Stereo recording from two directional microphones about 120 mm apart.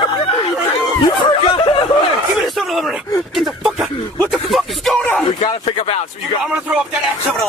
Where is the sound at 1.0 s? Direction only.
45° left (ahead or behind).